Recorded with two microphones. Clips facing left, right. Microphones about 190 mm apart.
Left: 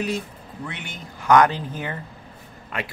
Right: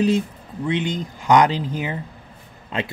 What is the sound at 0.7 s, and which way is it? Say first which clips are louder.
Speech: right 17 dB; 20° right (ahead or behind).